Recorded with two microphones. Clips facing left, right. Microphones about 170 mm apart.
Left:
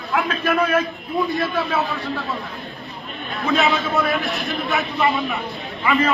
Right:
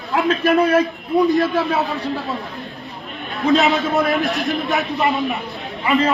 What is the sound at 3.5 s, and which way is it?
A man's voice, 20° right (ahead or behind).